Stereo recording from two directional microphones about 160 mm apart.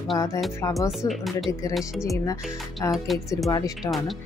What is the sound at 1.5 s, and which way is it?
Speech, 20° left (ahead or behind).